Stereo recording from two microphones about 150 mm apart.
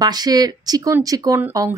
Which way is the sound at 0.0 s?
25° right (ahead or behind).